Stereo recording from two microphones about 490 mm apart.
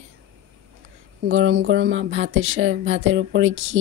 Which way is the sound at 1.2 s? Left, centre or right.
Right.